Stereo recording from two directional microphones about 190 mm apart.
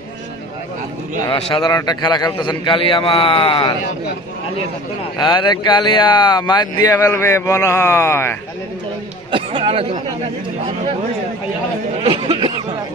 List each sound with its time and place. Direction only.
1.2 s a man's voice: 25° left (ahead or behind)
5.2 s speech: 25° left (ahead or behind)
9.3 s speech: 25° right (ahead or behind)
12.0 s a sound: 25° right (ahead or behind)